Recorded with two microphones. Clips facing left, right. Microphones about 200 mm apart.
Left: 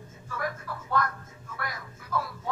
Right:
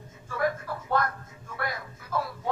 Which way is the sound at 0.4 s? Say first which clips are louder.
Right 6 dB; 30° right (ahead or behind).